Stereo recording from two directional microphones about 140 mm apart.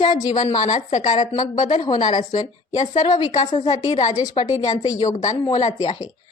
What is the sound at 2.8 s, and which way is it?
A woman's voice, 55° left (ahead or behind).